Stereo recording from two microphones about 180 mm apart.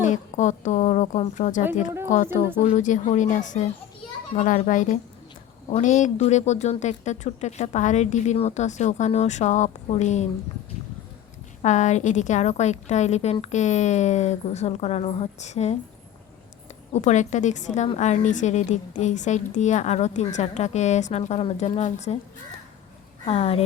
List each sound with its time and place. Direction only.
0.0 s a woman's voice: 45° left (ahead or behind)
11.6 s speech: 40° left (ahead or behind)
16.9 s speech: 40° left (ahead or behind)
23.2 s speech: 35° left (ahead or behind)